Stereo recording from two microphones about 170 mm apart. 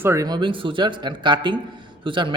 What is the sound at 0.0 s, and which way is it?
Speech, 20° right (ahead or behind).